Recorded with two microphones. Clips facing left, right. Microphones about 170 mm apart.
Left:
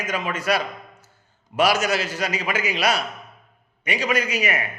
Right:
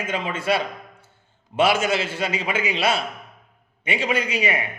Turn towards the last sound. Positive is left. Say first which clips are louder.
# right 1 dB
turn(degrees=-30)  # may be behind; listen again after turning